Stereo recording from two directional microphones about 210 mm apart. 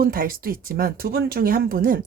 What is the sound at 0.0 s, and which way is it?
Speech, 45° right (ahead or behind).